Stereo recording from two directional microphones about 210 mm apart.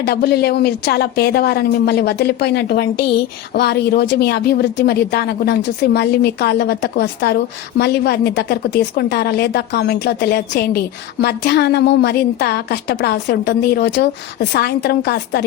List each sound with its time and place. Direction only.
0.0 s a woman's voice: 50° left (ahead or behind)